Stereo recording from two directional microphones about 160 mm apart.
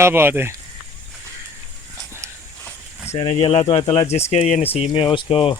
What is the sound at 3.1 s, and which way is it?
Speech, 35° left (ahead or behind).